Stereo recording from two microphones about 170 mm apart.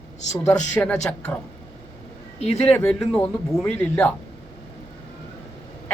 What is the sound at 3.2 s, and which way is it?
Speech, 15° left (ahead or behind).